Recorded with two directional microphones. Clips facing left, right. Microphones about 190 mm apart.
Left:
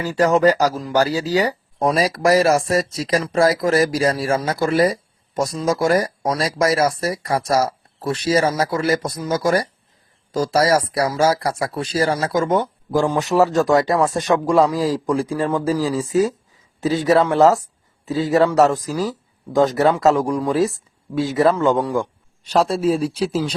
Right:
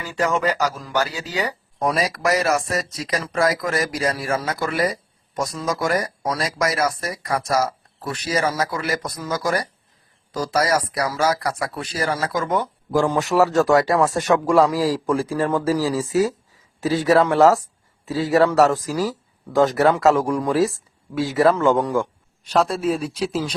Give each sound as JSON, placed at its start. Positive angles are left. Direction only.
{"t": 0.0, "sound": "speech", "side_deg": 40}
{"t": 16.9, "sound": "speech", "side_deg": 0}
{"t": 17.2, "sound": "speech", "side_deg": 20}
{"t": 17.6, "sound": "a sound", "side_deg": 20}
{"t": 18.9, "sound": "speech", "side_deg": 0}
{"t": 19.5, "sound": "speech", "side_deg": 20}
{"t": 22.7, "sound": "speech", "side_deg": 30}